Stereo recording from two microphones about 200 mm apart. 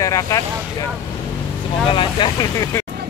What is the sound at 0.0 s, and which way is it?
Speech, 15° left (ahead or behind).